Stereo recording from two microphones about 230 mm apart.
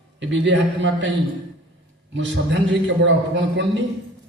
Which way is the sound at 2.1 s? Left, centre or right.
Right.